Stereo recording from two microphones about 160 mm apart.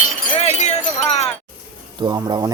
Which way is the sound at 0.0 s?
45° left (ahead or behind).